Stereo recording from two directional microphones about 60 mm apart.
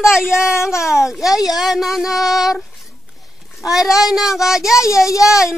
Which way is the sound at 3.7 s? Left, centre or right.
Centre.